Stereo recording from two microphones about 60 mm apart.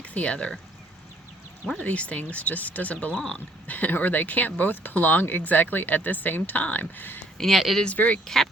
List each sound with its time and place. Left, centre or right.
0.0 s speech: left
1.8 s speech: left
7.3 s speech: centre
7.9 s speech: left